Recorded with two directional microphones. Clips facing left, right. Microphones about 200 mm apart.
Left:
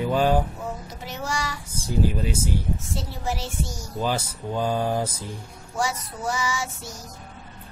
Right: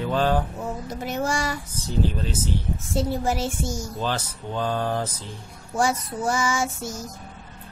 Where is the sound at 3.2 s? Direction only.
50° right (ahead or behind).